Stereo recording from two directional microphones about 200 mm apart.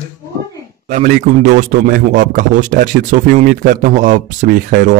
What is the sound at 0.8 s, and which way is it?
A man's voice, 40° right (ahead or behind).